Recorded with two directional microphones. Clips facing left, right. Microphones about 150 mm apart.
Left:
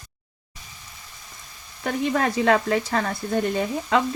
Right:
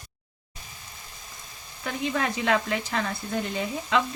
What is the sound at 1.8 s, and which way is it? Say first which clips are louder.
Speech: left 5 dB; 45° left (ahead or behind).